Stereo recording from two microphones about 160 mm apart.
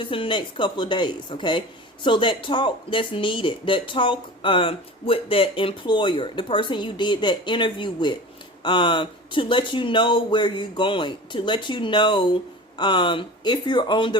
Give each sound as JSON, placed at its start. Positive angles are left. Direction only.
{"t": 0.0, "sound": "speech", "side_deg": 30}